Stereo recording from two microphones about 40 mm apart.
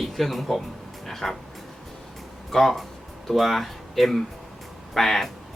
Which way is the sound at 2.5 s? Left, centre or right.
Centre.